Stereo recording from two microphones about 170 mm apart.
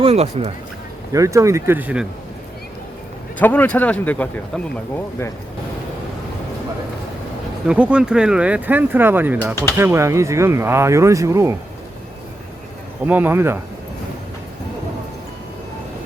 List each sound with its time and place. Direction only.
0.0 s speech: 35° right (ahead or behind)
1.1 s speech: 20° right (ahead or behind)
3.3 s speech: 10° left (ahead or behind)
7.7 s speech: 5° right (ahead or behind)
13.1 s speech: 10° right (ahead or behind)